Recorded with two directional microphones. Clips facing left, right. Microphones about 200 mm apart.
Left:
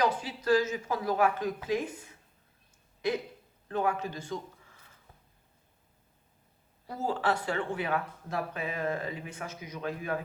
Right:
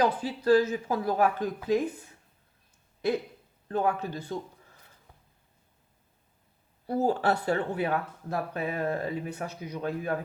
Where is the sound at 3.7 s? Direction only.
35° right (ahead or behind).